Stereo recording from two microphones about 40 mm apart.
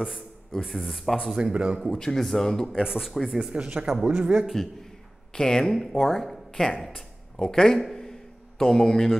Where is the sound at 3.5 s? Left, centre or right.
Right.